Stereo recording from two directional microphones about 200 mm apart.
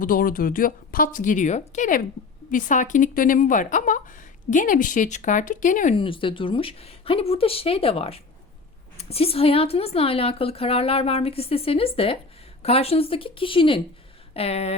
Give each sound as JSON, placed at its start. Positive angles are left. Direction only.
{"t": 0.0, "sound": "a woman's voice", "side_deg": 45}
{"t": 6.0, "sound": "a woman's voice", "side_deg": 25}